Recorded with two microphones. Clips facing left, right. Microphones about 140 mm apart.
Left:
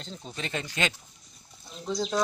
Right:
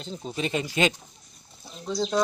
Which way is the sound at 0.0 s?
10° right (ahead or behind).